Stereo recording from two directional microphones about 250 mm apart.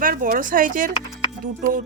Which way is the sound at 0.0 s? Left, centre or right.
Right.